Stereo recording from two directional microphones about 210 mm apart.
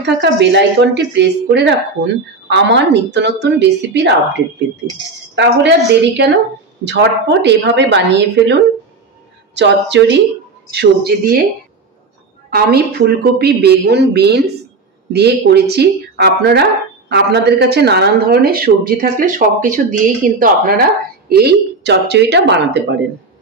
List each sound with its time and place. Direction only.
0.0 s a woman's voice: 55° right (ahead or behind)
12.4 s speech: 50° right (ahead or behind)
21.3 s speech: 50° right (ahead or behind)